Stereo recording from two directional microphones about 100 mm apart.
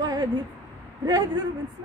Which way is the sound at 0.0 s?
40° right (ahead or behind).